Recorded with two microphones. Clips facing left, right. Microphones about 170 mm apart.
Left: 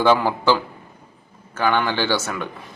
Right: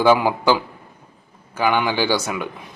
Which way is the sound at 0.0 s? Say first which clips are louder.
Right 2 dB; 10° right (ahead or behind).